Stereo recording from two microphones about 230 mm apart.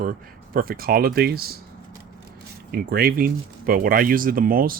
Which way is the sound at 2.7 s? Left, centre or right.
Right.